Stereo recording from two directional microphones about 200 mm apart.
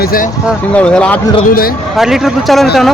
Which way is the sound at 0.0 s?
45° left (ahead or behind).